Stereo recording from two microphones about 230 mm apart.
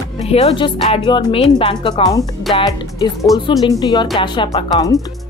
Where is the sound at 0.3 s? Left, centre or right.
Left.